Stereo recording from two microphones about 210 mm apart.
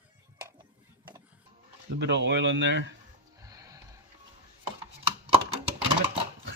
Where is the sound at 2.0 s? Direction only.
55° right (ahead or behind).